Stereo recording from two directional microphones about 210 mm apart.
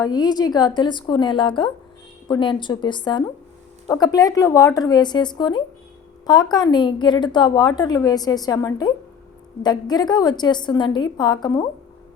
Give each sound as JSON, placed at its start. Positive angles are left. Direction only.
{"t": 0.0, "sound": "a woman's voice", "side_deg": 20}